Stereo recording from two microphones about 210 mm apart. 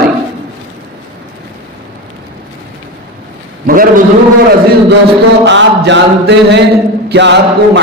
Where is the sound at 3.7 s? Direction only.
40° right (ahead or behind).